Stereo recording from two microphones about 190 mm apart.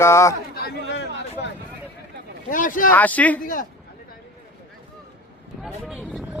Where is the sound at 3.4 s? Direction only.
45° left (ahead or behind).